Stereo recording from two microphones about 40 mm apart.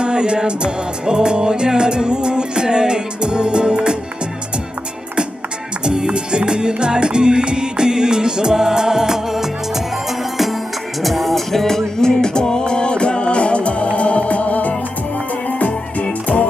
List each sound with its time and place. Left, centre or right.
0.0 s music: right
5.8 s music: right; by 13.8 s left
13.9 s organ: left
15.4 s music: left